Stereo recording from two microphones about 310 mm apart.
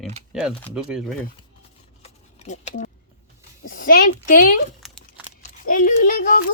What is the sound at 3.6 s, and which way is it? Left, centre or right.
Speech, left.